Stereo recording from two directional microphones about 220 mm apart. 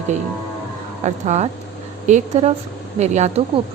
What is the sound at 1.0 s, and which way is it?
A woman's voice, 30° right (ahead or behind).